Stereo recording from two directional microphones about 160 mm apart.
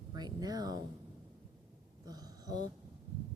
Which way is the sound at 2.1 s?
25° right (ahead or behind).